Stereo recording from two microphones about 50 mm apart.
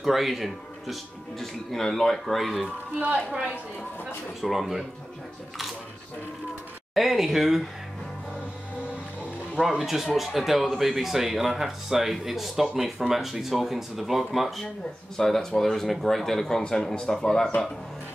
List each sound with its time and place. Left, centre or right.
0.0 s speech: centre
3.0 s speech: right
4.4 s speech: centre
7.0 s speech: centre
9.6 s speech: centre